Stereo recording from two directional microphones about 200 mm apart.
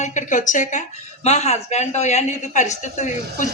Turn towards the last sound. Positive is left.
turn(degrees=35)  # may be behind; listen again after turning